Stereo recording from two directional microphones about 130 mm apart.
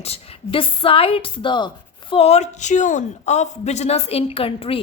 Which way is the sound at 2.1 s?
55° left (ahead or behind).